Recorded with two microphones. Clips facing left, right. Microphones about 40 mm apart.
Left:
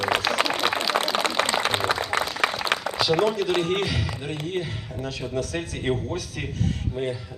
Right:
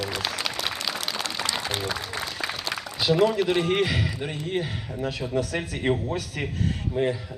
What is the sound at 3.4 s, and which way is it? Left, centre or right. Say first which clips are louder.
A man's voice: right 1 dB; centre.